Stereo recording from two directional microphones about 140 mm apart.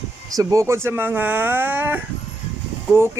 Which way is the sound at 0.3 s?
20° right (ahead or behind).